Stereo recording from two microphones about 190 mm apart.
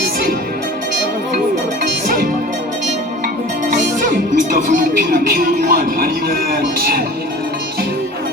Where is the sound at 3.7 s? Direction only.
45° right (ahead or behind).